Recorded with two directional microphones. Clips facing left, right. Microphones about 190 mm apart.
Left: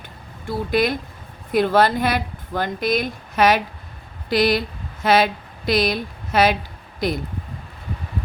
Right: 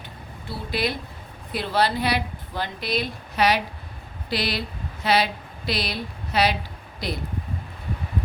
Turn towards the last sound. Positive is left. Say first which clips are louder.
# left 7 dB
turn(degrees=50)  # may be behind; listen again after turning